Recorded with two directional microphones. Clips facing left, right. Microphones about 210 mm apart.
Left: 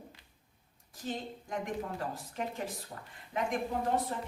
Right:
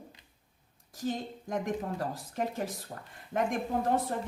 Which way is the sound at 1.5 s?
45° right (ahead or behind).